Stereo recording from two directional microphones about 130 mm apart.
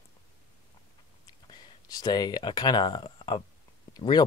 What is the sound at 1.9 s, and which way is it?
Speech, 30° left (ahead or behind).